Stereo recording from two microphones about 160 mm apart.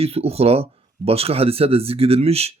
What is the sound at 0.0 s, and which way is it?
Speech, 40° right (ahead or behind).